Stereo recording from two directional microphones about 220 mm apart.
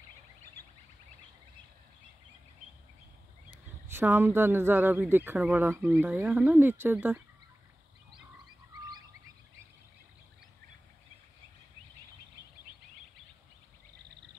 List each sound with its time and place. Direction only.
3.9 s speech: 10° right (ahead or behind)